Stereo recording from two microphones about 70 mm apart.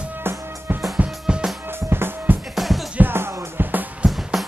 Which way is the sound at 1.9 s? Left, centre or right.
Right.